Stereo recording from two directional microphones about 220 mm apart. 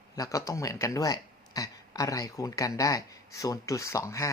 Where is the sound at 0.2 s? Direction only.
15° left (ahead or behind).